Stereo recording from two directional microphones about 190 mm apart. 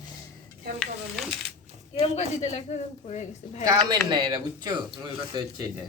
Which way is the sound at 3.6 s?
20° right (ahead or behind).